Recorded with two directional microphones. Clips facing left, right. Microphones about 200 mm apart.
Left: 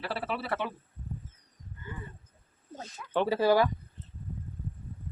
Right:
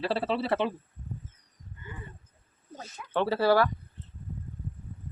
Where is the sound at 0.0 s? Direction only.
25° right (ahead or behind).